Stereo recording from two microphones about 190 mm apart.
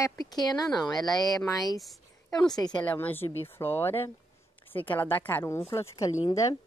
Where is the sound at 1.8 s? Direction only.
Centre (ahead or behind).